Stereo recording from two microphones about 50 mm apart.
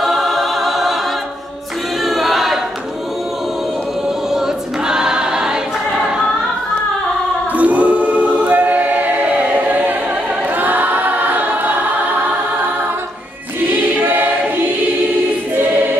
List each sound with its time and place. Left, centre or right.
0.0 s choir: centre
2.0 s choir: centre
4.3 s choir: centre
7.5 s choir: right
14.0 s choir: right